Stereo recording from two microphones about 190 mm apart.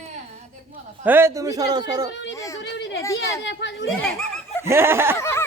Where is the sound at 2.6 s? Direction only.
65° left (ahead or behind).